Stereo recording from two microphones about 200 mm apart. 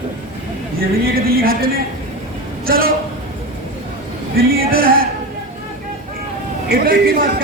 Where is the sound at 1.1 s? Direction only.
50° right (ahead or behind).